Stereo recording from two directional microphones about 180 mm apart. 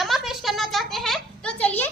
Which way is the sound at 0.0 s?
Centre (ahead or behind).